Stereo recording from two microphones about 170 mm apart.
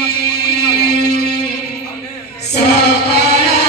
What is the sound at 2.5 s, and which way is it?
Music, 75° left (ahead or behind).